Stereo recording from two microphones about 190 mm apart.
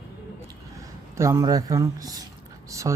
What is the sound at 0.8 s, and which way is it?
Speech, 15° right (ahead or behind).